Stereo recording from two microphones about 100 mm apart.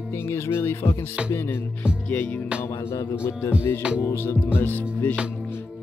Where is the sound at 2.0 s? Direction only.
15° left (ahead or behind).